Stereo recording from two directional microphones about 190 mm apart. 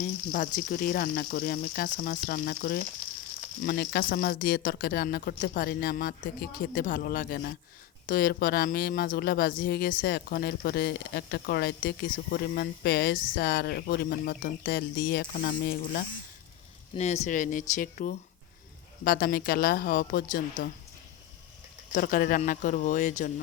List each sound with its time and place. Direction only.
0.0 s speech: 45° left (ahead or behind)
16.9 s speech: 35° left (ahead or behind)
21.9 s speech: 45° left (ahead or behind)